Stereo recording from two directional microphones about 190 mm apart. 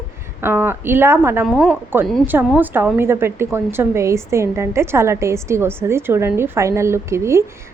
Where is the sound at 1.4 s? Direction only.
Centre (ahead or behind).